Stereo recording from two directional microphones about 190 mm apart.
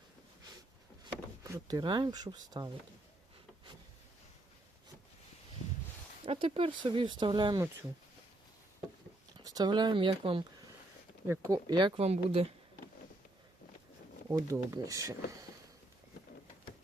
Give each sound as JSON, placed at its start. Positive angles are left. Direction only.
{"t": 1.5, "sound": "speech", "side_deg": -20}
{"t": 6.2, "sound": "speech", "side_deg": -30}
{"t": 9.4, "sound": "speech", "side_deg": -20}
{"t": 11.3, "sound": "speech", "side_deg": -20}
{"t": 14.3, "sound": "speech", "side_deg": -15}